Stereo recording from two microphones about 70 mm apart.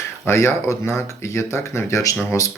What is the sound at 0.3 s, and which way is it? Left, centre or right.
Speech, left.